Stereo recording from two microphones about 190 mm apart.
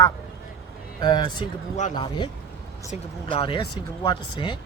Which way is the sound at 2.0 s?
25° left (ahead or behind).